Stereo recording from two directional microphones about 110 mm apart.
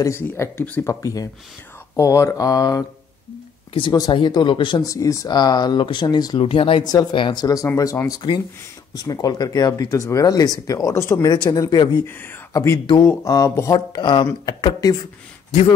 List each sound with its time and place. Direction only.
0.0 s speech: 25° left (ahead or behind)
0.8 s speech: 30° left (ahead or behind)
3.9 s speech: 40° left (ahead or behind)
4.8 s speech: 30° left (ahead or behind)
6.4 s speech: 55° left (ahead or behind)
6.9 s speech: 40° left (ahead or behind)
7.4 s speech: 30° left (ahead or behind)
11.4 s speech: 35° left (ahead or behind)
12.1 s speech: 20° left (ahead or behind)
12.5 s speech: 30° left (ahead or behind)
13.7 s speech: 45° left (ahead or behind)